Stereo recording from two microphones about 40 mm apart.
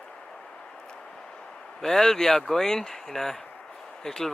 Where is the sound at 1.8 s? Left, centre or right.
Centre.